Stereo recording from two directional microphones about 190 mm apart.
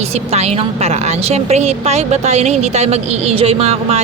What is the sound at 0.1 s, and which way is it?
A woman's voice, 35° right (ahead or behind).